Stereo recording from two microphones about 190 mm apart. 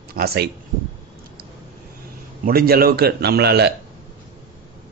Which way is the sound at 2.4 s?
50° right (ahead or behind).